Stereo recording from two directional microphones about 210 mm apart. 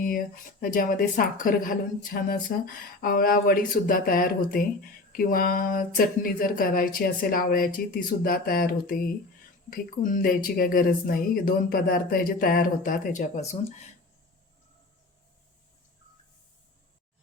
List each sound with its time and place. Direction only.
0.0 s speech: 40° left (ahead or behind)